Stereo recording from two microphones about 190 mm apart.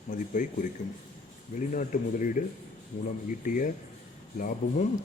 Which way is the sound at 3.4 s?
45° left (ahead or behind).